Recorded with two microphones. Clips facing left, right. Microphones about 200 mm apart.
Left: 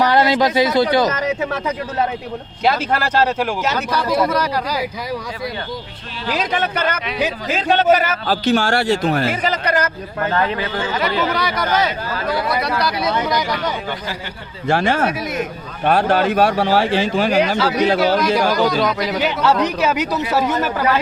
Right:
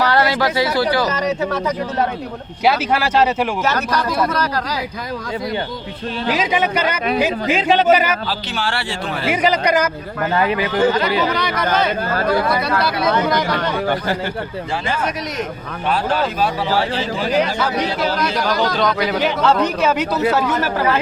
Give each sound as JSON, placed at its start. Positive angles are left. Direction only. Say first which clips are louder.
{"t": 0.0, "sound": "speech", "louder": "left 2 dB", "side_deg": 15}
{"t": 2.6, "sound": "speech", "louder": "right 1 dB", "side_deg": -10}
{"t": 3.8, "sound": "speech", "louder": "left 1 dB", "side_deg": 10}
{"t": 6.3, "sound": "speech", "louder": "right 1 dB", "side_deg": -10}
{"t": 8.3, "sound": "speech", "louder": "left 7 dB", "side_deg": 45}
{"t": 9.3, "sound": "speech", "louder": "right 3 dB", "side_deg": -10}
{"t": 11.2, "sound": "speech", "louder": "right 1 dB", "side_deg": 0}
{"t": 13.8, "sound": "speech", "louder": "right 7 dB", "side_deg": -55}
{"t": 14.7, "sound": "speech", "louder": "left 7 dB", "side_deg": 75}
{"t": 15.9, "sound": "a man's voice", "louder": "left 4 dB", "side_deg": 55}
{"t": 18.2, "sound": "speech", "louder": "left 3 dB", "side_deg": 5}